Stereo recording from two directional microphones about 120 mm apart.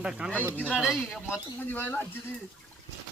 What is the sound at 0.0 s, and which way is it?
Speech, 5° right (ahead or behind).